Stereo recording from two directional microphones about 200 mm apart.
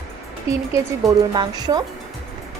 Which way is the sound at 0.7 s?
20° right (ahead or behind).